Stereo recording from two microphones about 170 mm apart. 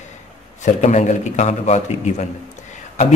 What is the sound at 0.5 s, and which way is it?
A man's voice, 45° left (ahead or behind).